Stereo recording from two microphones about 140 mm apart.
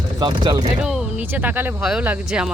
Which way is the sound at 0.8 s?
5° right (ahead or behind).